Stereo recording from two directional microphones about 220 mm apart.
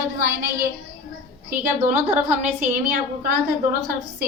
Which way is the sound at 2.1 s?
35° right (ahead or behind).